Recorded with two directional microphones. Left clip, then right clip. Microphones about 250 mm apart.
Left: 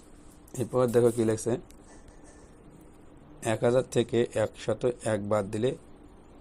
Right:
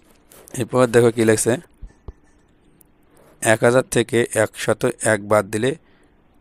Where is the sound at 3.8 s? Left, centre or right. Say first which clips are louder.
Right 8 dB; right.